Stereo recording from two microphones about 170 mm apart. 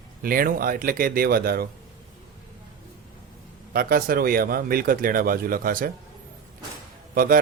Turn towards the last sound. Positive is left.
turn(degrees=-60)  # may be behind; listen again after turning